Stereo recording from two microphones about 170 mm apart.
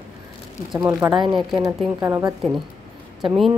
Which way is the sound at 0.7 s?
15° right (ahead or behind).